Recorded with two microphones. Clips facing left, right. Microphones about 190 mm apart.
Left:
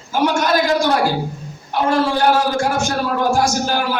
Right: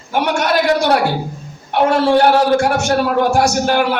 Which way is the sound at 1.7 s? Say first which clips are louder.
Right 5 dB; 65° right (ahead or behind).